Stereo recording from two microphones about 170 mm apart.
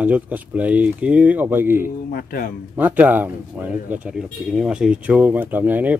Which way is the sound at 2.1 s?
60° left (ahead or behind).